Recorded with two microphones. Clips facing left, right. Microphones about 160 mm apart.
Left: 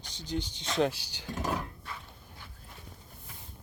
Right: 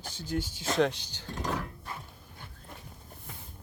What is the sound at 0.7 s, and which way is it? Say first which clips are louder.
Speech: right 1 dB; 5° left (ahead or behind).